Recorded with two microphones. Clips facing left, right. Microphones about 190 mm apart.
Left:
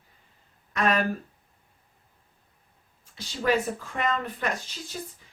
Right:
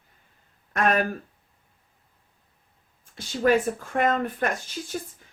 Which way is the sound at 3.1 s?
50° right (ahead or behind).